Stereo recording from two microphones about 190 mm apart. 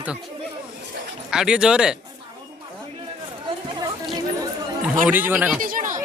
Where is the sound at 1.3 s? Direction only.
5° right (ahead or behind).